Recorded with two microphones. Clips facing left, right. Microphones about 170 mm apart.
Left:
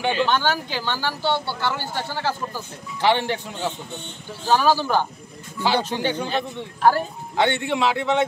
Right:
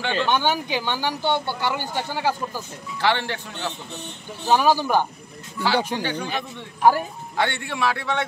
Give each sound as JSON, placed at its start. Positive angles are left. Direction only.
{"t": 0.0, "sound": "speech", "side_deg": 15}
{"t": 0.3, "sound": "speech", "side_deg": -15}
{"t": 3.0, "sound": "speech", "side_deg": 15}
{"t": 4.5, "sound": "speech", "side_deg": -15}
{"t": 7.3, "sound": "a man's voice", "side_deg": 20}